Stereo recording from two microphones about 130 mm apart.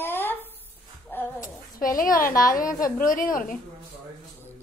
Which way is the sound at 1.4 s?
90° left.